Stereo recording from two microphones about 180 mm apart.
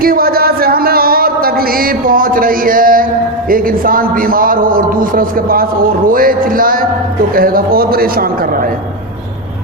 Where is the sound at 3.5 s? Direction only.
50° right (ahead or behind).